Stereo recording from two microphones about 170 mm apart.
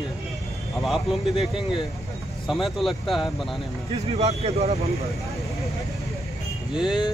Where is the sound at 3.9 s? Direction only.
40° right (ahead or behind).